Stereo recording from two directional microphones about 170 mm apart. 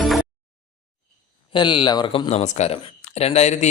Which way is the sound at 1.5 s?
30° left (ahead or behind).